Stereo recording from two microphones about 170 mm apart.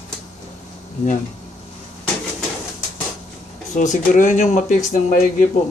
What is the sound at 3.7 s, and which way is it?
A man's voice, 45° left (ahead or behind).